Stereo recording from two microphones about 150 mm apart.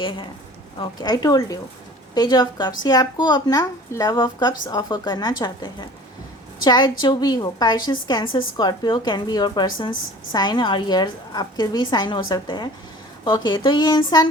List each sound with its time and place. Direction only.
0.0 s a woman's voice: 35° left (ahead or behind)